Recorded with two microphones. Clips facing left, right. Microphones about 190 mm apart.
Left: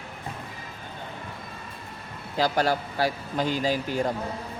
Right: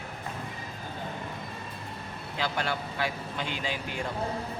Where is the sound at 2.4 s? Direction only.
40° left (ahead or behind).